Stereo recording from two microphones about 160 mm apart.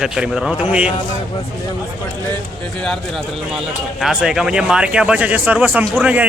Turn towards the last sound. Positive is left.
turn(degrees=-10)  # may be behind; listen again after turning